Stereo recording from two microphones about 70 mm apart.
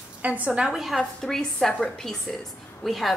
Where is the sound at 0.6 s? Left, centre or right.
Centre.